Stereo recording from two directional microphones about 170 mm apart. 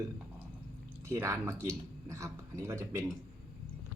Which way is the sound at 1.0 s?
15° right (ahead or behind).